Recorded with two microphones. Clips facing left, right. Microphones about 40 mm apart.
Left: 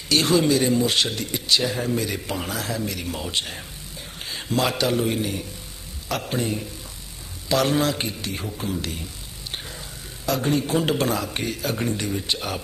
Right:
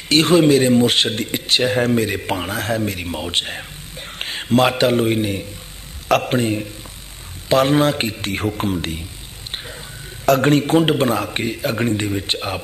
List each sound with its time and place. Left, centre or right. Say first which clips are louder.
0.1 s a man's voice: right 6 dB; right
6.0 s a man's voice: right 9 dB; right
8.7 s speech: right 5 dB; right
10.2 s speech: right 8 dB; right